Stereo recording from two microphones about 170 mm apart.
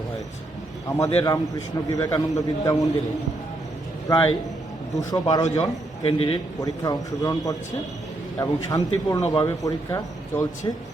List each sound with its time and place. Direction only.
0.9 s speech: 20° left (ahead or behind)
4.1 s speech: 20° left (ahead or behind)
6.0 s a man's voice: 35° left (ahead or behind)
6.6 s speech: 20° left (ahead or behind)